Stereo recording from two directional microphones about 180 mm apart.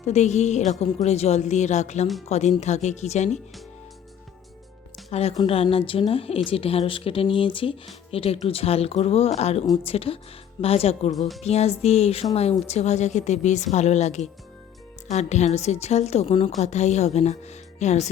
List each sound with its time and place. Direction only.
0.0 s a woman's voice: 40° left (ahead or behind)
5.1 s a woman's voice: 35° left (ahead or behind)